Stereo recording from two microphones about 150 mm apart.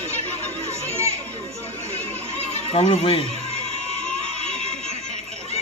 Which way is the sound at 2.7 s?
40° left (ahead or behind).